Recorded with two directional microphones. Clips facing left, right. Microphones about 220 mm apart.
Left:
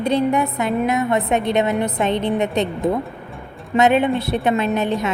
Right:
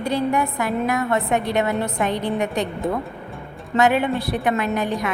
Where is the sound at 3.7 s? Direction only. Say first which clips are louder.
Left 3 dB; 20° left (ahead or behind).